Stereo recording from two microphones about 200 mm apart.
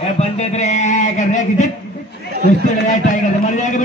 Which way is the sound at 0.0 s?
35° left (ahead or behind).